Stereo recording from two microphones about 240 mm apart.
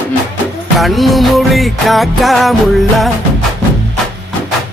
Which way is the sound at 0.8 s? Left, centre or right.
Centre.